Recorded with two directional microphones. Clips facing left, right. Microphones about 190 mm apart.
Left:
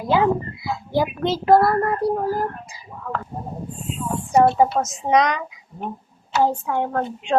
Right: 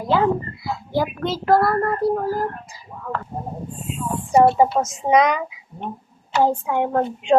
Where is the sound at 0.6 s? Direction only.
15° left (ahead or behind).